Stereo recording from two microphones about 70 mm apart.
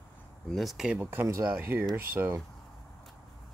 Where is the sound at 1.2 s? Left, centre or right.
Right.